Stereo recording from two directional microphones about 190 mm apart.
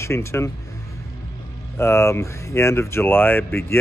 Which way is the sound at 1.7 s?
15° left (ahead or behind).